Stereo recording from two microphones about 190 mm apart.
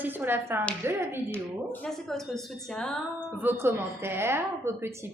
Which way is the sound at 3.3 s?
10° right (ahead or behind).